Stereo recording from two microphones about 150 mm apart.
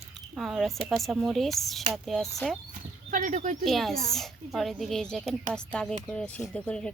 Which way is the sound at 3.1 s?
55° right (ahead or behind).